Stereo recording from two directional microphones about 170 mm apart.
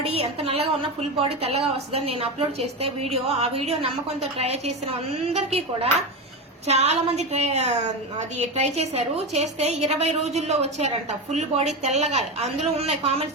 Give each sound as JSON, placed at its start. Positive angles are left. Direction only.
{"t": 0.0, "sound": "a woman's voice", "side_deg": -35}